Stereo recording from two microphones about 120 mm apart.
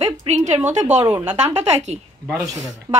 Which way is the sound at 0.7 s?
80° right.